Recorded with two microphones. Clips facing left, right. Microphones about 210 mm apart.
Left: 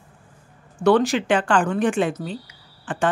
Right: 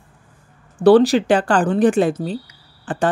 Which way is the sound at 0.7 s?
35° right (ahead or behind).